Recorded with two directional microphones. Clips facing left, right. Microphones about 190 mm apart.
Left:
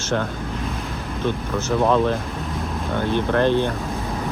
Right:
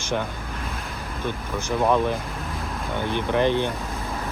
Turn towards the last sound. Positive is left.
turn(degrees=-15)  # may be behind; listen again after turning